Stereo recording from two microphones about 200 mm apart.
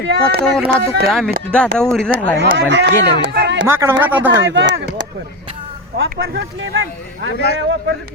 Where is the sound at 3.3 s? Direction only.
60° right (ahead or behind).